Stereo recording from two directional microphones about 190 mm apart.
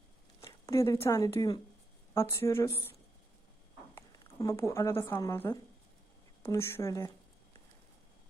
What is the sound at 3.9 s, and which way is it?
A woman's voice, 20° left (ahead or behind).